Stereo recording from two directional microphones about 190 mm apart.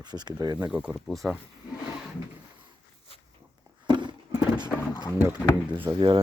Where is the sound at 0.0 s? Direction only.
20° right (ahead or behind).